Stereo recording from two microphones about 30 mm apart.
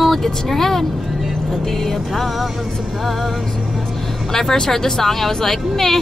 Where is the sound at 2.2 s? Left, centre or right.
Centre.